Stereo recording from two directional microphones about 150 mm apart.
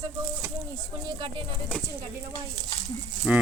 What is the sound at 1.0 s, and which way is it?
Speech, 35° right (ahead or behind).